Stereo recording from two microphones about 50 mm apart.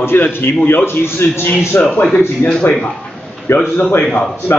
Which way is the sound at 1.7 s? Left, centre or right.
Left.